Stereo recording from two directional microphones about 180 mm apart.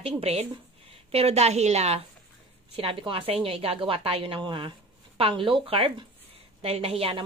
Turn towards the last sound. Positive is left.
turn(degrees=-30)  # may be behind; listen again after turning